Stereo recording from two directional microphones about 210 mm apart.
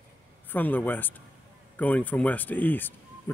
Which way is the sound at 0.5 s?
10° left (ahead or behind).